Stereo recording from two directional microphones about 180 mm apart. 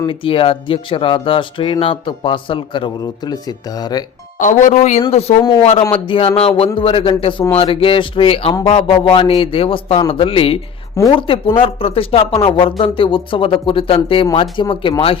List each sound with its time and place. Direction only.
0.0 s speech: 30° left (ahead or behind)
4.4 s speech: 45° left (ahead or behind)
5.4 s speech: 20° left (ahead or behind)